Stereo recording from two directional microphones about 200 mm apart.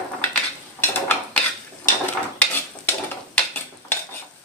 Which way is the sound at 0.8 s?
10° left (ahead or behind).